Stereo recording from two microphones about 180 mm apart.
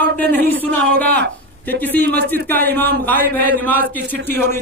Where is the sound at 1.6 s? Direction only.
10° left (ahead or behind).